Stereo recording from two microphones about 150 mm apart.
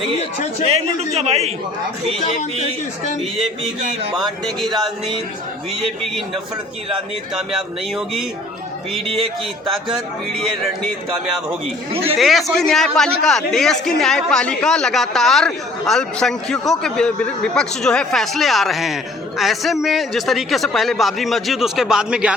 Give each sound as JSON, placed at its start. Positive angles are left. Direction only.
{"t": 0.7, "sound": "a man's voice", "side_deg": -45}
{"t": 4.1, "sound": "a man's voice", "side_deg": 0}
{"t": 7.3, "sound": "a man's voice", "side_deg": -5}
{"t": 9.0, "sound": "speech", "side_deg": -40}
{"t": 12.1, "sound": "a man's voice", "side_deg": 0}